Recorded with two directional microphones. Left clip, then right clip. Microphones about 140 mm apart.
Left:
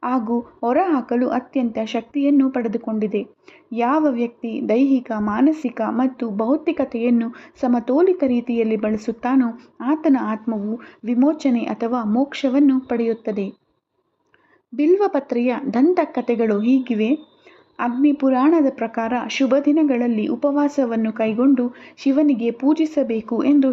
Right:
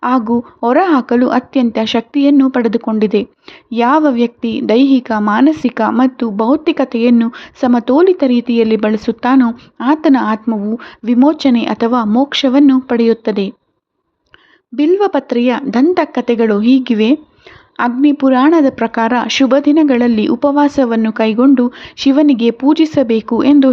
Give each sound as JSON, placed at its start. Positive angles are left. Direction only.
{"t": 0.0, "sound": "speech", "side_deg": -25}
{"t": 14.8, "sound": "speech", "side_deg": -20}